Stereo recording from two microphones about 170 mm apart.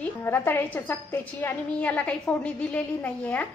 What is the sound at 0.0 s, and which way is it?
A woman's voice, 15° left (ahead or behind).